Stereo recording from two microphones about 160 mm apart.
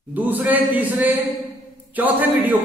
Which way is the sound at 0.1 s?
10° right (ahead or behind).